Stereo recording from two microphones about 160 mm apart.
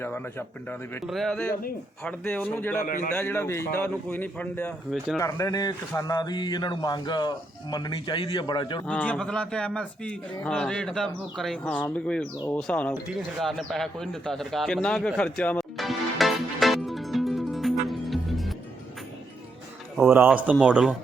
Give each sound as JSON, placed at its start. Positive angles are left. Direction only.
{"t": 0.0, "sound": "a man's voice", "side_deg": 10}
{"t": 1.0, "sound": "a man's voice", "side_deg": 0}
{"t": 2.8, "sound": "a man's voice", "side_deg": 55}
{"t": 3.1, "sound": "a man's voice", "side_deg": 15}
{"t": 8.9, "sound": "a man's voice", "side_deg": 10}
{"t": 12.9, "sound": "bird", "side_deg": 0}
{"t": 20.0, "sound": "speech", "side_deg": -10}